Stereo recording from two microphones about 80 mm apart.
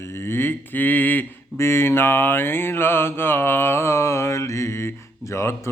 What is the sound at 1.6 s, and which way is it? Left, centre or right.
Mantra, left.